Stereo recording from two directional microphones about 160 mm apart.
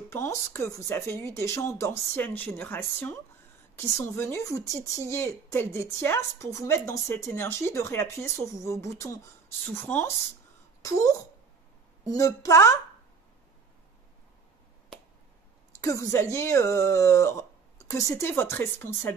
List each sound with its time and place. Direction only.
0.1 s a woman's voice: 15° left (ahead or behind)
15.8 s a woman's voice: 20° left (ahead or behind)